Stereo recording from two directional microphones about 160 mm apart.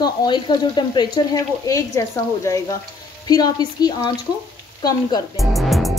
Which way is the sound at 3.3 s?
25° left (ahead or behind).